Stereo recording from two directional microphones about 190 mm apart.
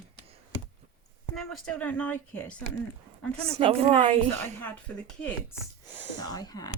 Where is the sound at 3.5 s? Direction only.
30° right (ahead or behind).